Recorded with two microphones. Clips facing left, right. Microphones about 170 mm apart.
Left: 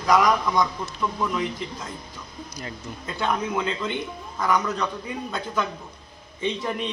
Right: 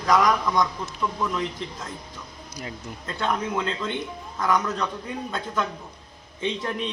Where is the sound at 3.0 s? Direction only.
5° left (ahead or behind).